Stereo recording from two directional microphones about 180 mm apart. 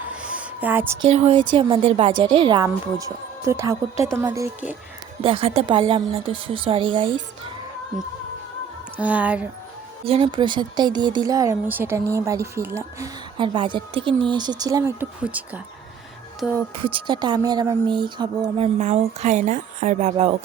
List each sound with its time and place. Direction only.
0.1 s a sound: 5° right (ahead or behind)
1.0 s a woman's voice: 35° right (ahead or behind)
2.6 s speech: 15° right (ahead or behind)
5.2 s speech: 30° right (ahead or behind)
9.0 s speech: 10° right (ahead or behind)
10.1 s speech: 30° right (ahead or behind)
13.3 s speech: 25° right (ahead or behind); by 16.6 s centre (ahead or behind)
16.8 s speech: 25° right (ahead or behind)